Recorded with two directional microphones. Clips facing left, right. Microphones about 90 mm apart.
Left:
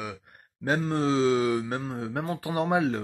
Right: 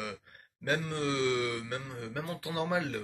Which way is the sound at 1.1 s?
30° left (ahead or behind).